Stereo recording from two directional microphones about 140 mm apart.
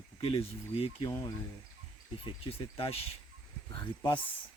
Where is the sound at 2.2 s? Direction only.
40° left (ahead or behind).